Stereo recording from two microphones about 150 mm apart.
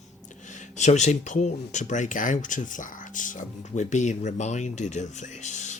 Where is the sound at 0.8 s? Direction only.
50° left (ahead or behind).